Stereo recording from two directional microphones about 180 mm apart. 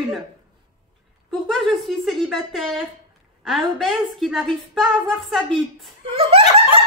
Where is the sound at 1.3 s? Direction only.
Centre (ahead or behind).